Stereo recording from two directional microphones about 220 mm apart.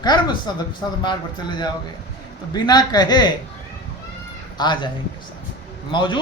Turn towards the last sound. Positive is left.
turn(degrees=20)  # may be behind; listen again after turning